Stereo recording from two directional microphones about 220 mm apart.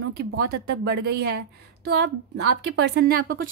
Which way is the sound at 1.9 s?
50° right (ahead or behind).